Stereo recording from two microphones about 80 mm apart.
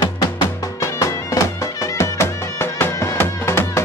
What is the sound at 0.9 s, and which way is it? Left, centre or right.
Music, left.